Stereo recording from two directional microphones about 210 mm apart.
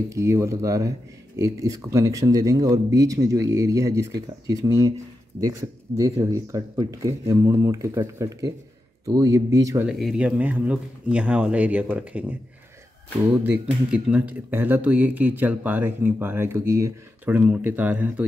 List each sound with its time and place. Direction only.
0.1 s speech: 15° right (ahead or behind)
9.8 s speech: centre (ahead or behind)